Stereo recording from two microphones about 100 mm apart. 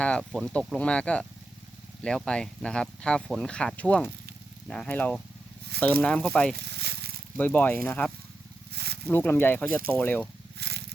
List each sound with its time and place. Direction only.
0.0 s speech: 10° left (ahead or behind)
0.3 s speech: centre (ahead or behind)
0.8 s speech: 10° left (ahead or behind)
7.3 s speech: 20° left (ahead or behind)